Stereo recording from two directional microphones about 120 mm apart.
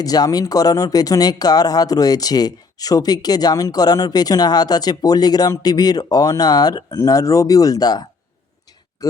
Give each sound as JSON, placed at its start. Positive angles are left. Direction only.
{"t": 0.0, "sound": "speech", "side_deg": 30}